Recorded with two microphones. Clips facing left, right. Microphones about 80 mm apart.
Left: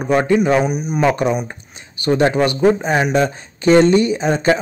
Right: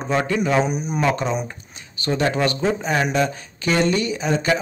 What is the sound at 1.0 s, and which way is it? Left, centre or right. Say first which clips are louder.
Speech: left 6 dB; centre.